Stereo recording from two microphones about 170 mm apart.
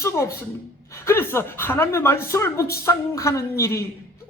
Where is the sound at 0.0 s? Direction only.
15° left (ahead or behind).